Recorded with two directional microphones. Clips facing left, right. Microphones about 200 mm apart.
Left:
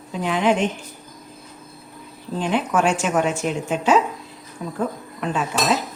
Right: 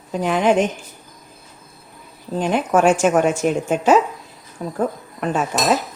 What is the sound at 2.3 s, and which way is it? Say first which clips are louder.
A woman's voice: right 3 dB; 45° right (ahead or behind).